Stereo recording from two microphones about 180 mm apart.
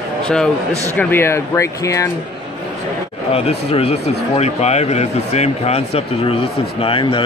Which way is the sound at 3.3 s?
35° left (ahead or behind).